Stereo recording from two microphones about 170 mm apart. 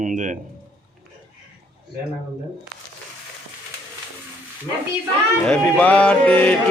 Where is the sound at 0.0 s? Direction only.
50° right (ahead or behind).